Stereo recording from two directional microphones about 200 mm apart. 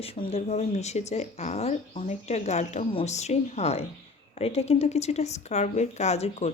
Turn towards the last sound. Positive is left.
turn(degrees=35)  # may be behind; listen again after turning